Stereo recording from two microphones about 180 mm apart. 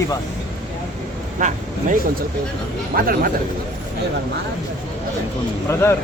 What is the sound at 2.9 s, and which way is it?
Speech, 55° right (ahead or behind).